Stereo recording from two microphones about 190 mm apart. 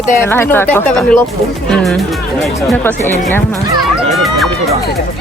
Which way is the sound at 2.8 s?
10° left (ahead or behind).